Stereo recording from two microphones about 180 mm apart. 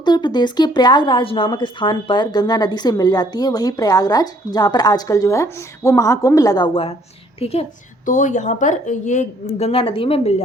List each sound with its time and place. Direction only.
0.0 s a woman's voice: 25° left (ahead or behind)
8.0 s a woman's voice: 45° left (ahead or behind)